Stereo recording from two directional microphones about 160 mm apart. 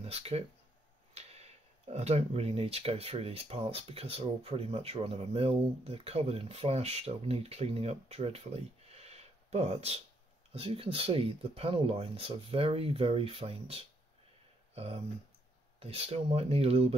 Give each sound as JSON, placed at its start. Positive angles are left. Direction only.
{"t": 0.0, "sound": "speech", "side_deg": -40}
{"t": 15.8, "sound": "speech", "side_deg": -40}